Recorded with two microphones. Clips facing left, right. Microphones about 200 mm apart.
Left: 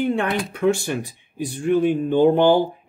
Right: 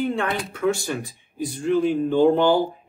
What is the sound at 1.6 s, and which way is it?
Speech, 15° left (ahead or behind).